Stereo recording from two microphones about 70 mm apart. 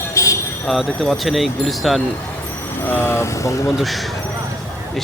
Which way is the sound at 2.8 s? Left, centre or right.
Left.